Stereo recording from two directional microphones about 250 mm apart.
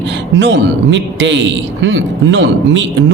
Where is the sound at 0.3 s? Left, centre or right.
Right.